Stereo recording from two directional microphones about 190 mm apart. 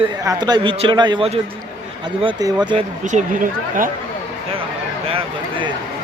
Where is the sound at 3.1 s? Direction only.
40° right (ahead or behind).